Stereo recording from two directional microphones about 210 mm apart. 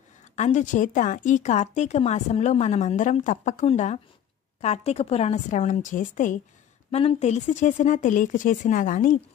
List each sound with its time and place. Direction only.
0.4 s speech: 35° left (ahead or behind)